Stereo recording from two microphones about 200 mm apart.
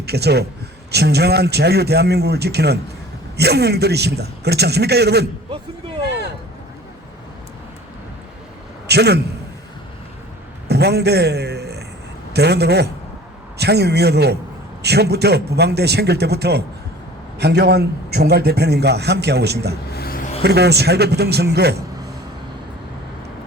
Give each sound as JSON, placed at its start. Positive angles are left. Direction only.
{"t": 0.0, "sound": "a man's voice", "side_deg": -55}
{"t": 6.1, "sound": "vehicle", "side_deg": -55}
{"t": 8.9, "sound": "a man's voice", "side_deg": -55}
{"t": 10.7, "sound": "a sound", "side_deg": -55}
{"t": 12.3, "sound": "a man's voice", "side_deg": -55}
{"t": 19.9, "sound": "a sound", "side_deg": 50}
{"t": 20.4, "sound": "a man's voice", "side_deg": -55}